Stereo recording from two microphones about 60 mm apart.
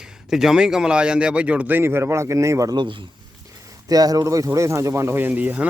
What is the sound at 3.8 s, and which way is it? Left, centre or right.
Speech, right.